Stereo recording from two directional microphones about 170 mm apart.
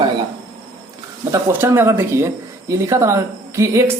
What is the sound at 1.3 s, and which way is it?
A man's voice, 15° right (ahead or behind).